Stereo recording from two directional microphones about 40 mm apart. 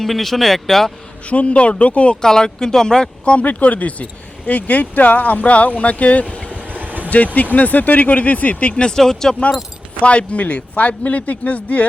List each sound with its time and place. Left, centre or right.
0.0 s speech: centre
1.3 s speech: left
2.2 s speech: centre
3.3 s speech: left
6.6 s vehicle: right
7.5 s speech: left
9.0 s speech: centre
10.0 s speech: left